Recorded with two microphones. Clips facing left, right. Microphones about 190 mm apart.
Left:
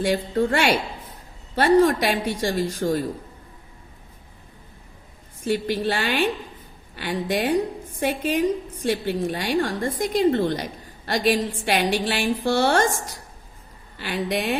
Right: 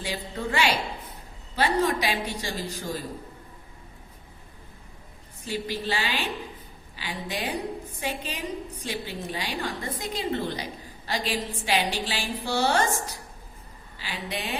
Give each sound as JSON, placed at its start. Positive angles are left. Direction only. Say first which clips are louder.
{"t": 0.0, "sound": "a woman's voice", "louder": "left 10 dB", "side_deg": 55}
{"t": 5.5, "sound": "a woman's voice", "louder": "left 7 dB", "side_deg": 55}
{"t": 13.9, "sound": "a woman's voice", "louder": "left 9 dB", "side_deg": 60}